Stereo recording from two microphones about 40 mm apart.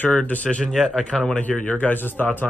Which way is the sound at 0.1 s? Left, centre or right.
Left.